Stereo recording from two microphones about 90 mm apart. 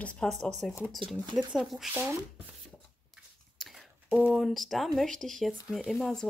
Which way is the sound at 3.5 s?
Centre (ahead or behind).